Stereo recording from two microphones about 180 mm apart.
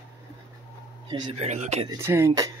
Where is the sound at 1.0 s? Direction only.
30° right (ahead or behind).